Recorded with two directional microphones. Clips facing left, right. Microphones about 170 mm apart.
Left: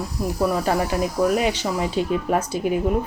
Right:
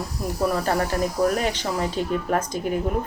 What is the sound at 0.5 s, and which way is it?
Speech, 10° left (ahead or behind).